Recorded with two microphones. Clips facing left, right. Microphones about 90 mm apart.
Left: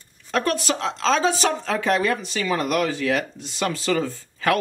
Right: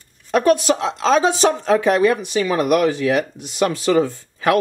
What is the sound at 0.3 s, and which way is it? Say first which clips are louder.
Speech: right 8 dB; 15° right (ahead or behind).